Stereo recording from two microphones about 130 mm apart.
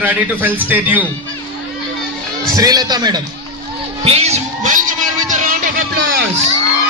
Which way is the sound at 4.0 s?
55° right (ahead or behind).